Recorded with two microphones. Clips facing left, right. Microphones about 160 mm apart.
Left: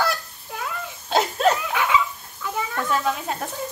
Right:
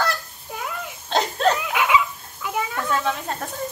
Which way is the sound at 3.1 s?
5° left (ahead or behind).